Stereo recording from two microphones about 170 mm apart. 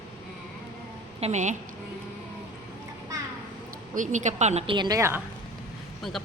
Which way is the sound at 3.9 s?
50° right (ahead or behind).